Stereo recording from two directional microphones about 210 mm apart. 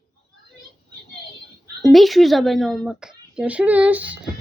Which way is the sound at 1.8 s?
Centre (ahead or behind).